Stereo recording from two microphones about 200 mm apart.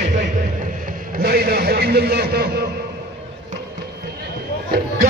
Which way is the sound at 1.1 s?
50° right (ahead or behind).